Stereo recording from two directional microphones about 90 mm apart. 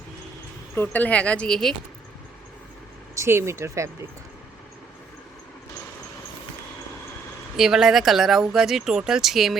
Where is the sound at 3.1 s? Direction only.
30° right (ahead or behind).